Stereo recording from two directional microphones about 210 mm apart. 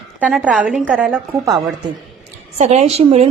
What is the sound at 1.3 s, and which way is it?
Speech, 15° right (ahead or behind).